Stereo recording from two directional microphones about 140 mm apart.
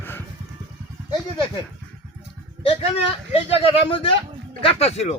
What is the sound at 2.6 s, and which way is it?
A man's voice, 45° left (ahead or behind).